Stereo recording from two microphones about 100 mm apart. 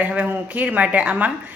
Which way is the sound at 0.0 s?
15° right (ahead or behind).